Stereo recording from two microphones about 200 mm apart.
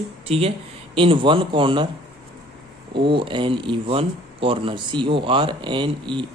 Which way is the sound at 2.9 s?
25° right (ahead or behind).